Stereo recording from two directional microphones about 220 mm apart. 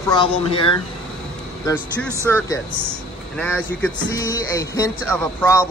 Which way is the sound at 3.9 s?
15° left (ahead or behind).